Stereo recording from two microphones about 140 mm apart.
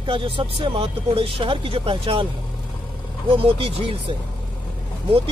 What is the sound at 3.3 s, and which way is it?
Speech, 40° right (ahead or behind).